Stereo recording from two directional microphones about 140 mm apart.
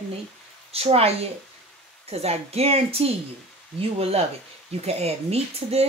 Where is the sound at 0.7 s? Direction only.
45° right (ahead or behind).